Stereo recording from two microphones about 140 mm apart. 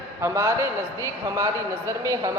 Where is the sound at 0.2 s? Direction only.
20° right (ahead or behind).